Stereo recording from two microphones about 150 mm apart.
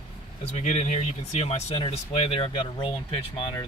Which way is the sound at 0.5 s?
50° left (ahead or behind).